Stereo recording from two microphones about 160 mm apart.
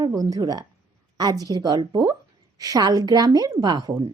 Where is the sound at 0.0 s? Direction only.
20° right (ahead or behind).